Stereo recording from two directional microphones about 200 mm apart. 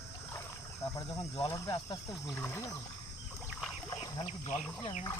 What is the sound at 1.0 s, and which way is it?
Cricket, 20° left (ahead or behind).